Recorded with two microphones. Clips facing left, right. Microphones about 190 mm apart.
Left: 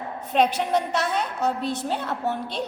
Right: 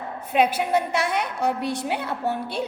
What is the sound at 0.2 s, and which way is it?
A woman's voice, 10° right (ahead or behind).